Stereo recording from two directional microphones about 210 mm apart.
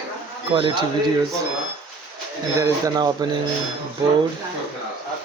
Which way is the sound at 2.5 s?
15° right (ahead or behind).